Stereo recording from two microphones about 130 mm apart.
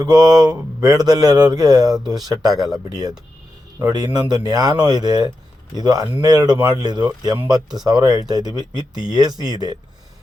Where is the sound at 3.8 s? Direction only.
30° right (ahead or behind).